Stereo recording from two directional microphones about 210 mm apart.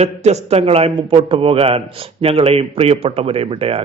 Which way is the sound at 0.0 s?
30° right (ahead or behind).